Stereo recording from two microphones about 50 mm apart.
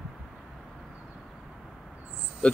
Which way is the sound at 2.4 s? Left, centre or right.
Left.